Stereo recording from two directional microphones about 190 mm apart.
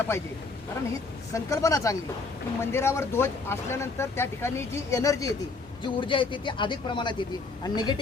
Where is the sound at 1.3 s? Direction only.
15° left (ahead or behind).